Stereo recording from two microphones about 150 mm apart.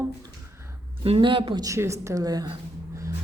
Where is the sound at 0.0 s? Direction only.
20° right (ahead or behind).